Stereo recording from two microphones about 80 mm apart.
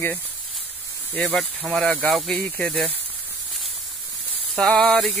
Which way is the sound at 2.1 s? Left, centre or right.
Centre.